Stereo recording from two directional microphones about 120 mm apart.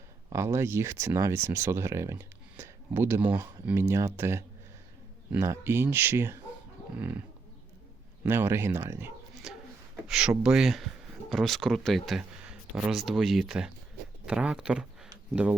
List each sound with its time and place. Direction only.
0.3 s speech: 25° right (ahead or behind)
8.2 s speech: 20° right (ahead or behind)
9.4 s speech: 5° right (ahead or behind)
12.4 s a sound: 10° right (ahead or behind)
12.9 s speech: centre (ahead or behind)